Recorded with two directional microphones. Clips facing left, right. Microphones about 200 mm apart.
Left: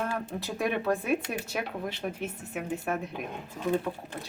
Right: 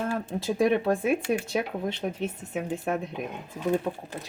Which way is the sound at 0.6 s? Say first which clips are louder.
Right 5 dB; 25° right (ahead or behind).